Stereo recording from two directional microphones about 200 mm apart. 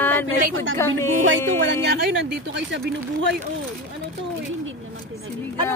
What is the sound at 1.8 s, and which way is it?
Speech, 60° right (ahead or behind).